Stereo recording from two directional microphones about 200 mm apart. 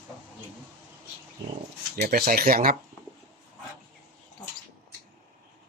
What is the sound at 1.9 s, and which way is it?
Speech, 50° right (ahead or behind).